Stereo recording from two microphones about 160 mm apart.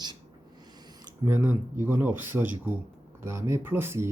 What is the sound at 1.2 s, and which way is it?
Speech, 10° right (ahead or behind).